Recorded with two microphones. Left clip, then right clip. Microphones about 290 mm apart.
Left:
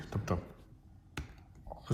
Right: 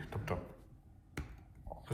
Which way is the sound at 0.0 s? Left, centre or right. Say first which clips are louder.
Left 3 dB; centre.